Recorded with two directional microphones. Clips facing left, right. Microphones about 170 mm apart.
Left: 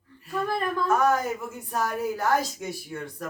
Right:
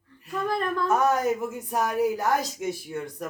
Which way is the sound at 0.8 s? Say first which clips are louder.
Even; 20° right (ahead or behind).